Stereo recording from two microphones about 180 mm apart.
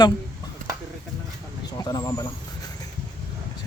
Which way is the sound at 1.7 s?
20° left (ahead or behind).